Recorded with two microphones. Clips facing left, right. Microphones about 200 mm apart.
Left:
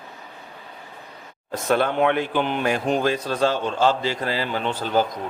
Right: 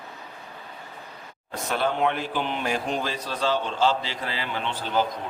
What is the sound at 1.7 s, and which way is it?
A man's voice, 60° left (ahead or behind).